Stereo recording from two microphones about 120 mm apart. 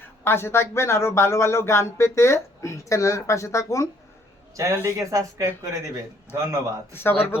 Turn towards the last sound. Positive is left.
turn(degrees=20)  # may be behind; listen again after turning